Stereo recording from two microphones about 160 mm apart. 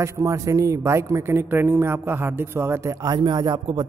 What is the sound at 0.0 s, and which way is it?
Speech, 20° right (ahead or behind).